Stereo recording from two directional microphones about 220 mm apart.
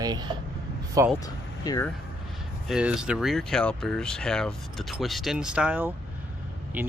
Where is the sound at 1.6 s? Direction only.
15° left (ahead or behind).